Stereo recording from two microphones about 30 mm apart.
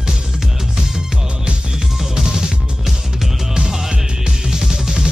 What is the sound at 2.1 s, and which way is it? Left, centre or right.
Music, centre.